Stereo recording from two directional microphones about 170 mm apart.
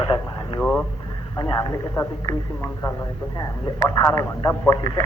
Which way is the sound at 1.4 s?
20° left (ahead or behind).